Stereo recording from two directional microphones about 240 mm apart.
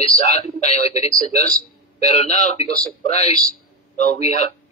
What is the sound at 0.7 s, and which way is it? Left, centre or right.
Speech, left.